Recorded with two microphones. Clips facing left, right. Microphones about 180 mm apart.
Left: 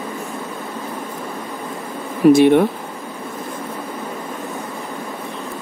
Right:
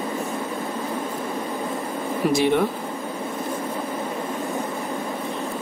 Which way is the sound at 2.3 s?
55° left (ahead or behind).